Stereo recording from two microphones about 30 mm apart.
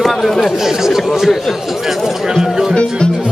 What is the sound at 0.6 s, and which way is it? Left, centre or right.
Speech, centre.